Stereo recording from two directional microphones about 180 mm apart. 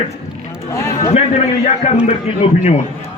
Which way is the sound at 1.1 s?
35° left (ahead or behind).